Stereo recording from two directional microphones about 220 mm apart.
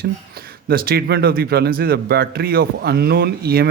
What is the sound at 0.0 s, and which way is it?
A man's voice, 45° right (ahead or behind).